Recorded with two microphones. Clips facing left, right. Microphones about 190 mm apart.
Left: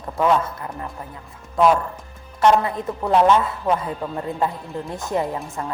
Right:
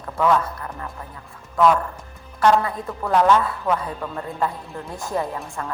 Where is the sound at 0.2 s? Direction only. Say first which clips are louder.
Left 1 dB; 20° left (ahead or behind).